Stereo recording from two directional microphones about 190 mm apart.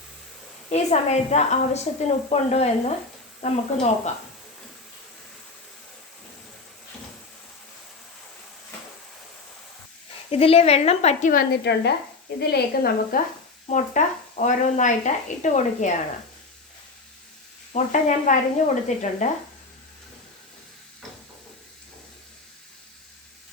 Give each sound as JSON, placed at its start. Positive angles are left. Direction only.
{"t": 0.7, "sound": "speech", "side_deg": 35}
{"t": 10.3, "sound": "speech", "side_deg": 30}
{"t": 13.7, "sound": "speech", "side_deg": 40}
{"t": 17.7, "sound": "speech", "side_deg": 35}